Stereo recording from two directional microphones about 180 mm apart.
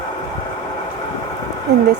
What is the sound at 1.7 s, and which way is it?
Speech, 65° right (ahead or behind).